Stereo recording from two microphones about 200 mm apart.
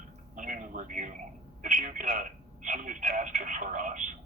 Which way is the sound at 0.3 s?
40° right (ahead or behind).